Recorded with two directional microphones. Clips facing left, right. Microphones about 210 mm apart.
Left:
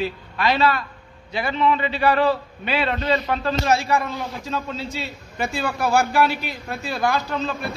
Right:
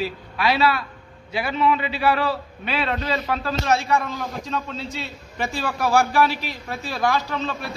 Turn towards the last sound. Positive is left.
turn(degrees=0)  # may be behind; listen again after turning